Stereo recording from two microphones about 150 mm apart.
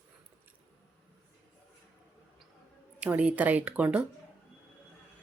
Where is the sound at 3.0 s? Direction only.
10° right (ahead or behind).